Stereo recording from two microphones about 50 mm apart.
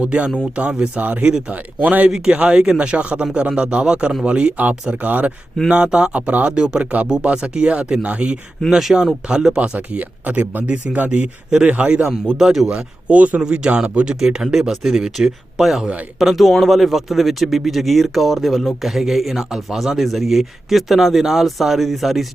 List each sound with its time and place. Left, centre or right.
0.0 s speech: right
1.2 s speech: centre
1.5 s speech: right
2.0 s speech: centre; by 5.3 s right
5.7 s speech: centre
8.7 s speech: centre
9.3 s speech: centre
9.7 s speech: right
11.7 s speech: right
12.4 s speech: centre
12.6 s speech: right; by 22.3 s centre